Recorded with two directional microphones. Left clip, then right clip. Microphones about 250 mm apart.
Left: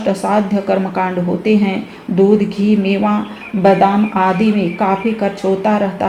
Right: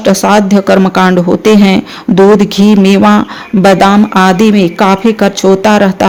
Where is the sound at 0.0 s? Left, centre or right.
Right.